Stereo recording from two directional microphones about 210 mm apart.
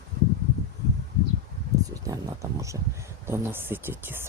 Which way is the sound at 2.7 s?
20° right (ahead or behind).